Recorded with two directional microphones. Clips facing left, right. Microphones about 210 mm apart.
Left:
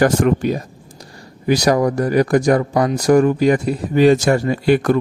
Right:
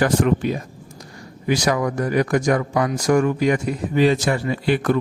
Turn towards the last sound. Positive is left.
turn(degrees=45)  # may be behind; listen again after turning